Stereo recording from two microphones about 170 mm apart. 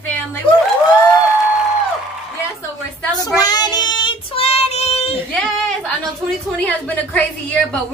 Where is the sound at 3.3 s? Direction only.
20° left (ahead or behind); by 5.1 s 40° left (ahead or behind).